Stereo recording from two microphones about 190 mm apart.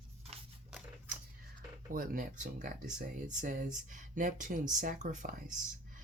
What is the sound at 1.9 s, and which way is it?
Speech, 45° right (ahead or behind).